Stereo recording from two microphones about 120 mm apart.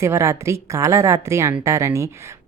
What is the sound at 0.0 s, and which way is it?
Speech, 25° right (ahead or behind).